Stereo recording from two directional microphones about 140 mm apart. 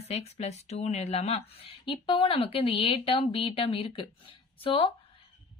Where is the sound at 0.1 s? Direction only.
50° left (ahead or behind).